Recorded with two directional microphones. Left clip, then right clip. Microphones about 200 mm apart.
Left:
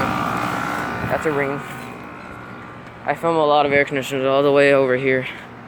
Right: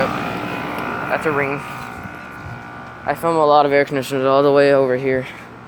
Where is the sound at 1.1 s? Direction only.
5° right (ahead or behind).